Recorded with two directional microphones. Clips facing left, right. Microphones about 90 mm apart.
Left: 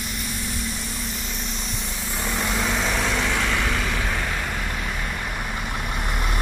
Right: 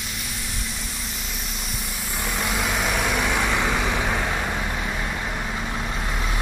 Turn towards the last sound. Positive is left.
turn(degrees=5)  # may be behind; listen again after turning